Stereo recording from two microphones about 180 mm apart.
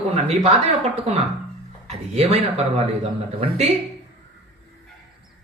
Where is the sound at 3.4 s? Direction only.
35° right (ahead or behind).